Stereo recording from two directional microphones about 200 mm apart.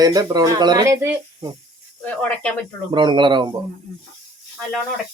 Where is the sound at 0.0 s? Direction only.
20° right (ahead or behind).